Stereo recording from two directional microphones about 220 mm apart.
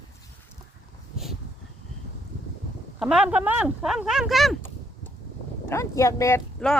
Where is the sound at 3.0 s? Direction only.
5° right (ahead or behind).